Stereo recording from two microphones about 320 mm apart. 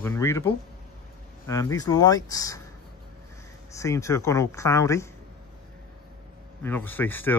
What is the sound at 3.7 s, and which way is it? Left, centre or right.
Speech, centre.